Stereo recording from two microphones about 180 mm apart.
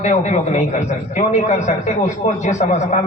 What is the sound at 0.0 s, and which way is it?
A man's voice, 40° left (ahead or behind).